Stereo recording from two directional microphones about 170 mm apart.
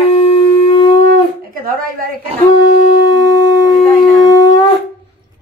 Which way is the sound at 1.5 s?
60° right (ahead or behind).